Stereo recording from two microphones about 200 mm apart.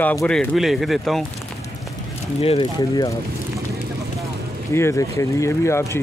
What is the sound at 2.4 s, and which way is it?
Speech, 30° left (ahead or behind).